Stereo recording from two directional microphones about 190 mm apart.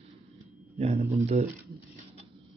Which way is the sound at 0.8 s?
30° right (ahead or behind).